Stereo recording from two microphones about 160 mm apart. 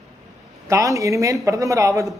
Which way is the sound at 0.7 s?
20° right (ahead or behind).